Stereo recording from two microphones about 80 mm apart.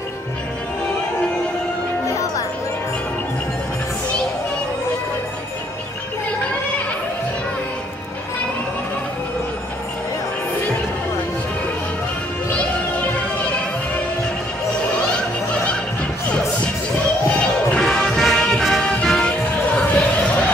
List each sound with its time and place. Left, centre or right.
2.0 s music: left
17.7 s music: centre